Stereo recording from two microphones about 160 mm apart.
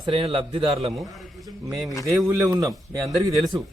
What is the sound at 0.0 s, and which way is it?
Speech, 35° right (ahead or behind).